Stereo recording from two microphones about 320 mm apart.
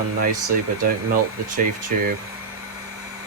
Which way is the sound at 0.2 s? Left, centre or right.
Right.